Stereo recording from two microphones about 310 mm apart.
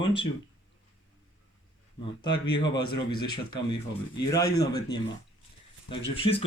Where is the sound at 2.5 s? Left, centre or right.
Centre.